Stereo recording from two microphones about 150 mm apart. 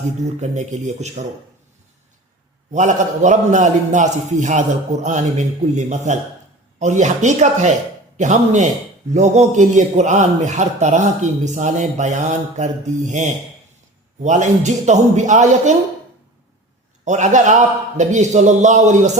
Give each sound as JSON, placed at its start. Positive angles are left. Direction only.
{"t": 0.3, "sound": "a man's voice", "side_deg": -50}
{"t": 2.7, "sound": "a man's voice", "side_deg": -55}
{"t": 17.1, "sound": "a man's voice", "side_deg": -50}